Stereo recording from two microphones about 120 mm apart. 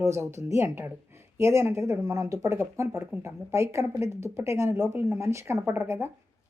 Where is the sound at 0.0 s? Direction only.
25° right (ahead or behind).